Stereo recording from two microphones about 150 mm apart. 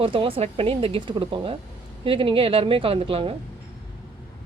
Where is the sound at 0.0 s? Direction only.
35° right (ahead or behind).